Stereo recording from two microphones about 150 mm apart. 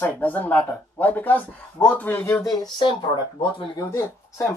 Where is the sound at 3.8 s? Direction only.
20° left (ahead or behind).